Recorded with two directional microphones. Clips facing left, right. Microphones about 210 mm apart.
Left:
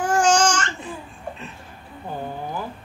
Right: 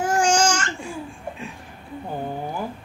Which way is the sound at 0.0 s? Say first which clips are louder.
Left 1 dB; 10° right (ahead or behind).